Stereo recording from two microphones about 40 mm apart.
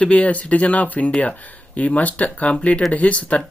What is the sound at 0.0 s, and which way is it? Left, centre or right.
Speech, left.